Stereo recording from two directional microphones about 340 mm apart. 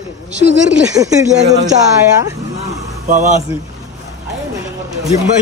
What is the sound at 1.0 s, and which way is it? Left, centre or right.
Speech, centre.